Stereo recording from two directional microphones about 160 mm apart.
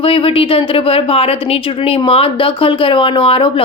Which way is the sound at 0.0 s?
35° left (ahead or behind).